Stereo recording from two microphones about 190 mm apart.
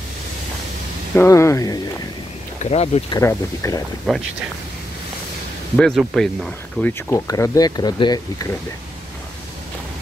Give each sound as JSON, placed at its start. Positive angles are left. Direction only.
{"t": 1.1, "sound": "speech", "side_deg": 15}
{"t": 2.6, "sound": "speech", "side_deg": 35}
{"t": 3.1, "sound": "speech", "side_deg": 15}
{"t": 4.1, "sound": "speech", "side_deg": 0}
{"t": 5.8, "sound": "speech", "side_deg": 0}